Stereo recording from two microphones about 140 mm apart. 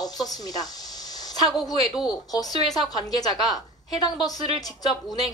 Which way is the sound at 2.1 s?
30° left (ahead or behind).